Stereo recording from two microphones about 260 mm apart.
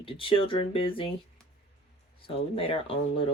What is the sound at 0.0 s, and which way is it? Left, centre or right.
Speech, left.